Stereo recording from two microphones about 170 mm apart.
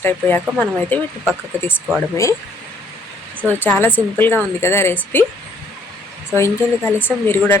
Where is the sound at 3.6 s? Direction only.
10° left (ahead or behind).